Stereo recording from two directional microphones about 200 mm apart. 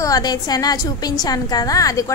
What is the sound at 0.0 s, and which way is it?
A woman's voice, 20° left (ahead or behind).